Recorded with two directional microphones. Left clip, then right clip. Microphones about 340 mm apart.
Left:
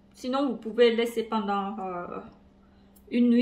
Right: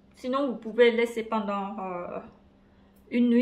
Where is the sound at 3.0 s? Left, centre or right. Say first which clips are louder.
Even; centre.